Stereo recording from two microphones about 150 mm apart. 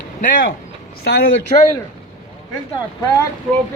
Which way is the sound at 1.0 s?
90° left.